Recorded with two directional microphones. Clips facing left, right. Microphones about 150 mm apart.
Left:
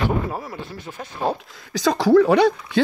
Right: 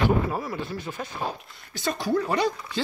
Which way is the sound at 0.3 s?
30° left (ahead or behind).